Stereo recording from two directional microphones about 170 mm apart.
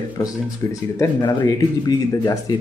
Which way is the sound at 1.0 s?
25° left (ahead or behind).